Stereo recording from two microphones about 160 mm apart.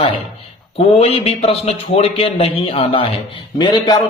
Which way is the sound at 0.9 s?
40° left (ahead or behind).